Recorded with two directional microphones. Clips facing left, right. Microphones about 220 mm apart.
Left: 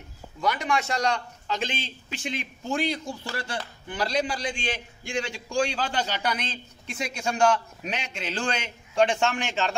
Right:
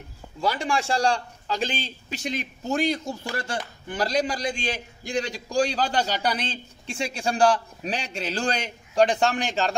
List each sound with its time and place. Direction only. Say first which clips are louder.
0.4 s a man's voice: right 1 dB; 30° right (ahead or behind)